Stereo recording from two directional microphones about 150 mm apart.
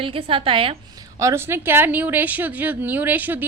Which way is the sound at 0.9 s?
20° right (ahead or behind).